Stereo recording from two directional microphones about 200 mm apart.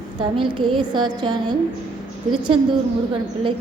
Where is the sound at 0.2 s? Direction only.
25° right (ahead or behind).